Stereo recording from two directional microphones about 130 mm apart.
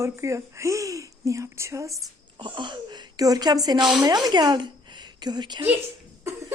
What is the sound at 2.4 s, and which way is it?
A woman's voice, 40° right (ahead or behind).